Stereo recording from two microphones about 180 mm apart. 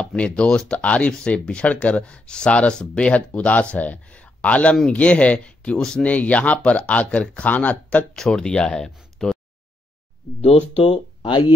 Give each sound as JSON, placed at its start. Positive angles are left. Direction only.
{"t": 0.0, "sound": "speech", "side_deg": 5}
{"t": 10.4, "sound": "speech", "side_deg": 35}